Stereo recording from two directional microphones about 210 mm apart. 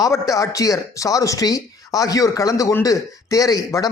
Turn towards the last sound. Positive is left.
turn(degrees=15)  # may be behind; listen again after turning